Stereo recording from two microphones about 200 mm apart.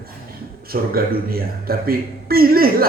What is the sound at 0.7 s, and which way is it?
A man's voice, 50° right (ahead or behind).